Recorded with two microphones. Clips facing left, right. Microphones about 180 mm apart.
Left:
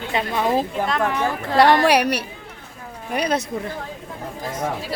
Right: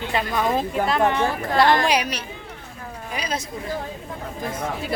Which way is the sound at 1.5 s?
70° left (ahead or behind).